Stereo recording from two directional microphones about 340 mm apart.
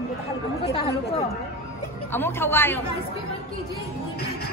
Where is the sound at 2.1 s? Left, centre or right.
Centre.